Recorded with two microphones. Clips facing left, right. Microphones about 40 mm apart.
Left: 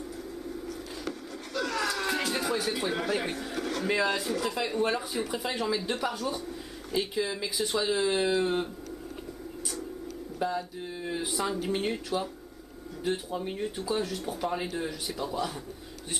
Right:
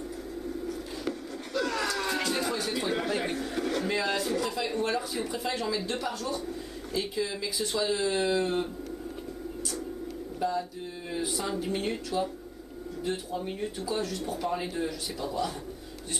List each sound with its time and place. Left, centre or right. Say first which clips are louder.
0.7 s a sound: right 3 dB; centre
3.8 s speech: left 1 dB; centre
10.4 s speech: right 1 dB; centre